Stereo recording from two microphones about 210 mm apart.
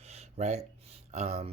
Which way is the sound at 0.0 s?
30° right (ahead or behind).